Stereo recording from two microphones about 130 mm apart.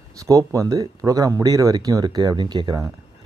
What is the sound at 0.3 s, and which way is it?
Speech, 25° right (ahead or behind).